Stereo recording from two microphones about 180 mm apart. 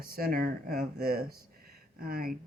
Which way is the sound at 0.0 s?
55° right (ahead or behind).